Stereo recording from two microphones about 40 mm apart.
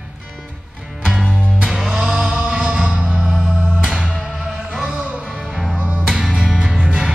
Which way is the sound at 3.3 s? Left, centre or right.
Centre.